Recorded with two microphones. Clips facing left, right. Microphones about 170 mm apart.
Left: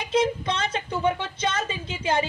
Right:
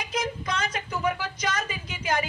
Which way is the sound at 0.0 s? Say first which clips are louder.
Left 7 dB; 30° left (ahead or behind).